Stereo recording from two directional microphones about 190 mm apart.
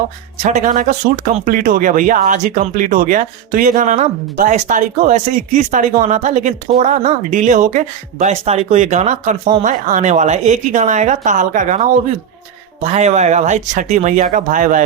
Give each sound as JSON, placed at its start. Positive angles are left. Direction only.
{"t": 0.4, "sound": "speech", "side_deg": -40}